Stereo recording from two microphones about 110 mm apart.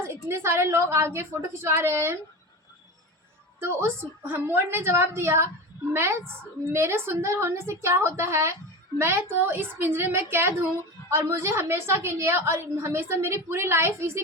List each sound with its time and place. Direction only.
0.0 s a woman's voice: 25° right (ahead or behind)
3.6 s a woman's voice: 20° right (ahead or behind)